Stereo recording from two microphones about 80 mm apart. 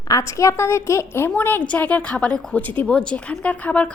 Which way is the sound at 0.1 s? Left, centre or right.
Left.